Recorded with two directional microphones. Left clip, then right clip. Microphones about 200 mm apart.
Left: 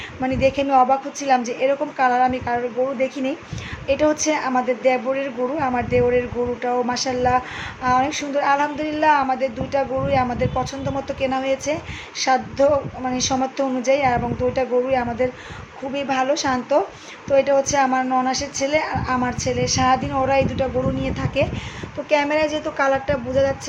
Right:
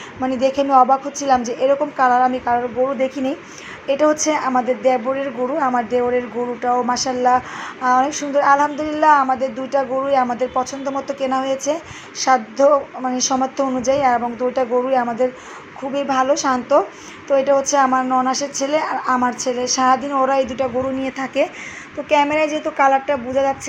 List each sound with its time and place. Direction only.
0.2 s a woman's voice: 5° right (ahead or behind)
3.8 s a woman's voice: 5° right (ahead or behind)